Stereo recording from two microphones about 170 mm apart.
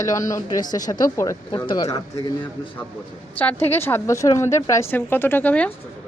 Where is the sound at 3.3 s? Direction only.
10° left (ahead or behind).